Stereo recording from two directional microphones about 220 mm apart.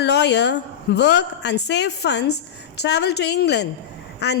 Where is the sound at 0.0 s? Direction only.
50° left (ahead or behind).